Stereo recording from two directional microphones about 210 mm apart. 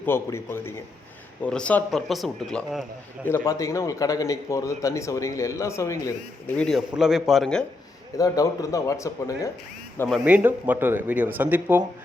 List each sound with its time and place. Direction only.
0.0 s a man's voice: 10° left (ahead or behind)
3.2 s a man's voice: 15° left (ahead or behind)
6.5 s speech: 5° left (ahead or behind)
8.2 s a man's voice: 15° left (ahead or behind)
10.2 s speech: 10° right (ahead or behind)